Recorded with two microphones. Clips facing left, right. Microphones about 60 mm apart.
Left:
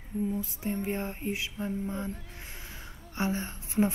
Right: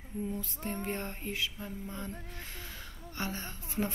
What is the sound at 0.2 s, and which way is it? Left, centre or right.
Speech, centre.